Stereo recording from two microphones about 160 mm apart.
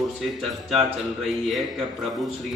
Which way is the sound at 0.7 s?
Centre (ahead or behind).